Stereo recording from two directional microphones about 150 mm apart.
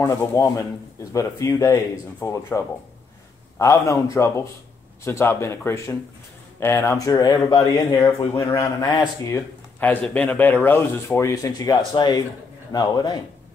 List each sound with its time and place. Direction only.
0.0 s speech: 20° left (ahead or behind)
9.3 s speech: 10° left (ahead or behind); by 13.2 s 25° left (ahead or behind)